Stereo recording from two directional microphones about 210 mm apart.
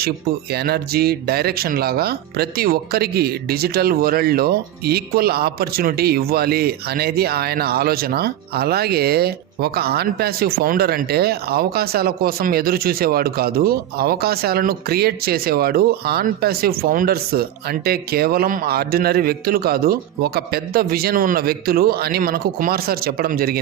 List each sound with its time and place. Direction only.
0.5 s speech: 50° right (ahead or behind)